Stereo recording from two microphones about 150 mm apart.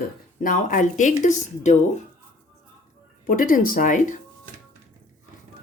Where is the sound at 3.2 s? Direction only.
65° left (ahead or behind).